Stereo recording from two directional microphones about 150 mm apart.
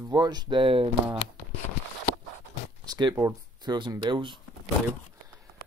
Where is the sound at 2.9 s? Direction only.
30° right (ahead or behind).